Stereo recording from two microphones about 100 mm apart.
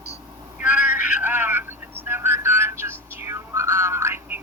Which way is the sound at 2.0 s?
20° right (ahead or behind).